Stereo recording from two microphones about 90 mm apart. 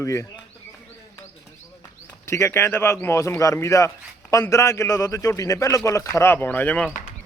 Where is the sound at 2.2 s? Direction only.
30° left (ahead or behind).